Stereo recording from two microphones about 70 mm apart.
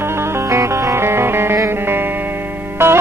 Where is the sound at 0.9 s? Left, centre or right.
Right.